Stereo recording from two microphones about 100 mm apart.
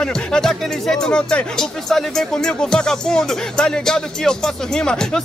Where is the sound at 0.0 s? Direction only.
5° left (ahead or behind).